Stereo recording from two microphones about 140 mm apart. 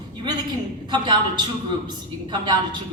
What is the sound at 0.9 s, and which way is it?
Speech, 30° right (ahead or behind).